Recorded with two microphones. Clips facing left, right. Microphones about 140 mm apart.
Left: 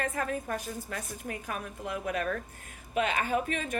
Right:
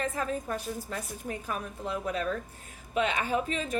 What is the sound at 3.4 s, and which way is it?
Speech, 30° right (ahead or behind).